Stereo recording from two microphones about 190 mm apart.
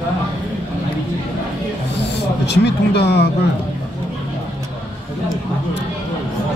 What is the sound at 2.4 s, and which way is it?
Speech, 60° left (ahead or behind).